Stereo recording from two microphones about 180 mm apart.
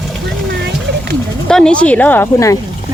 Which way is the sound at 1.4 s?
5° left (ahead or behind).